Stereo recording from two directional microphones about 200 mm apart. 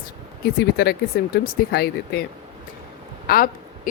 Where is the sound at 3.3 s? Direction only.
45° left (ahead or behind).